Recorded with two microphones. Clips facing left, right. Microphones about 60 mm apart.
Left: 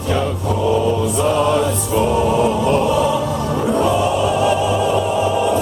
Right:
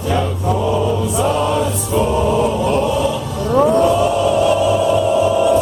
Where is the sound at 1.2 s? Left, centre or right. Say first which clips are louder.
Left 1 dB; centre.